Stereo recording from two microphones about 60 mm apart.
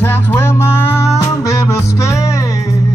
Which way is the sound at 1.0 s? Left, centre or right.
Left.